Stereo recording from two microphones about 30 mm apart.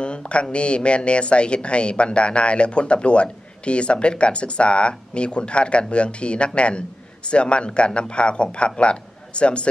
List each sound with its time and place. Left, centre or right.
0.0 s speech: left